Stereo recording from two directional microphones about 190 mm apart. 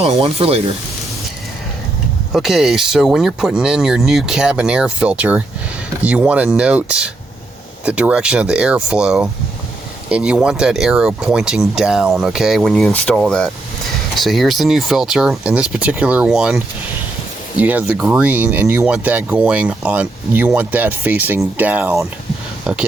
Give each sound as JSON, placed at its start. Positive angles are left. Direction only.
{"t": 0.0, "sound": "speech", "side_deg": -30}
{"t": 2.3, "sound": "speech", "side_deg": 0}
{"t": 17.6, "sound": "speech", "side_deg": -10}